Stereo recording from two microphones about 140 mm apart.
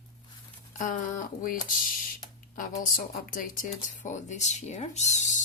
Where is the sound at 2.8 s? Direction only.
75° left (ahead or behind); by 5.2 s 50° left (ahead or behind).